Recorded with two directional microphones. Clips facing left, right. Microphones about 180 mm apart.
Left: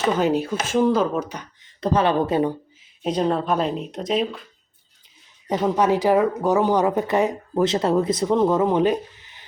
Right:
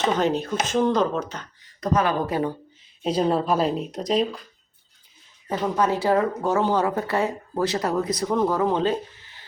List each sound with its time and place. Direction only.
0.0 s speech: 10° left (ahead or behind)
1.8 s speech: 30° left (ahead or behind)
3.0 s speech: 5° right (ahead or behind)
5.5 s speech: 20° left (ahead or behind)